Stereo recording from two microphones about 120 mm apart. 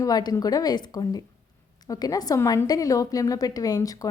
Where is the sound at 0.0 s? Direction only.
35° left (ahead or behind).